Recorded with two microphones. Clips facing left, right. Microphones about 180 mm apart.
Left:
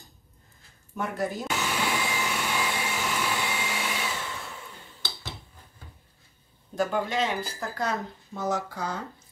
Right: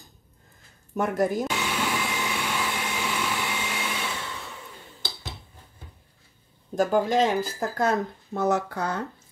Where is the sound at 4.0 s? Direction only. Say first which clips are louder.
Even; 5° left (ahead or behind).